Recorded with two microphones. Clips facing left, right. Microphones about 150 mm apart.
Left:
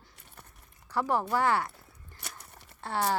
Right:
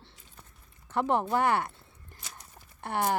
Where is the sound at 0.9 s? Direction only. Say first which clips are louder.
Right 2 dB; 20° right (ahead or behind).